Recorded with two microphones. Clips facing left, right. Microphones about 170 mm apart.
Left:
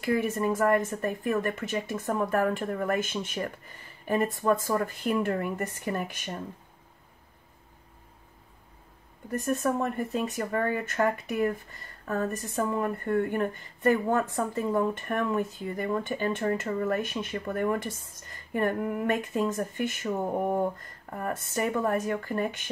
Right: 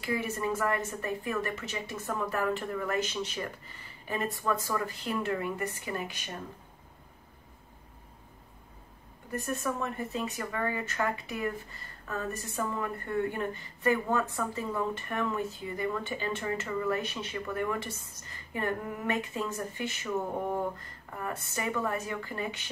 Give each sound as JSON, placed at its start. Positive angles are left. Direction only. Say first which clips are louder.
{"t": 0.0, "sound": "a woman's voice", "louder": "left 5 dB", "side_deg": 50}
{"t": 9.5, "sound": "a woman's voice", "louder": "left 6 dB", "side_deg": 55}
{"t": 21.1, "sound": "a woman's voice", "louder": "left 4 dB", "side_deg": 50}